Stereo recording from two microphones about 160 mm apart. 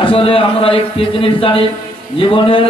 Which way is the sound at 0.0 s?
35° left (ahead or behind).